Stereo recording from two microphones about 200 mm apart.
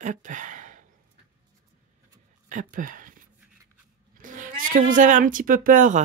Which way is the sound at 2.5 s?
40° right (ahead or behind).